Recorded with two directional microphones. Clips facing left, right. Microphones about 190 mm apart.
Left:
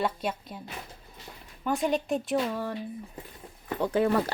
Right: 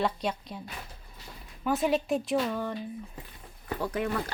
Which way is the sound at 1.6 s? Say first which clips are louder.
Right 1 dB; 5° right (ahead or behind).